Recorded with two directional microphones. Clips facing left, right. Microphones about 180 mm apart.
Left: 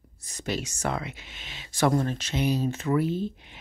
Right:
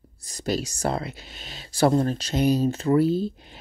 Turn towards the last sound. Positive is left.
turn(degrees=-35)  # may be behind; listen again after turning